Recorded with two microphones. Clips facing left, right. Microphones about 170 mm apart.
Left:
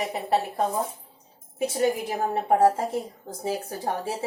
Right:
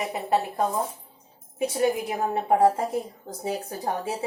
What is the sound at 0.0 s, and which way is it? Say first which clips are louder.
Speech: even; 35° left (ahead or behind).